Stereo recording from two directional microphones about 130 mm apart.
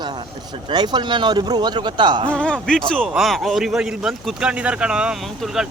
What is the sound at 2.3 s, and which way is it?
Speech, 10° left (ahead or behind).